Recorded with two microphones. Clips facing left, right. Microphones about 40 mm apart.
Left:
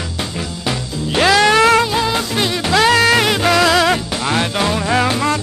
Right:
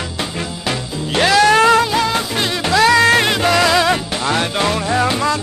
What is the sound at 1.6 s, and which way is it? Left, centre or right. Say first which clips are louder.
Music: even; left.